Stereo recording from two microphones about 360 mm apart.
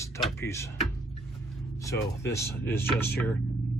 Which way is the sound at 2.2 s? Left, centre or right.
Centre.